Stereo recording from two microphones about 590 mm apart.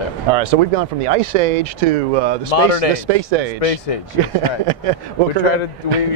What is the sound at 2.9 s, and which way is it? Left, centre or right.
Speech, right.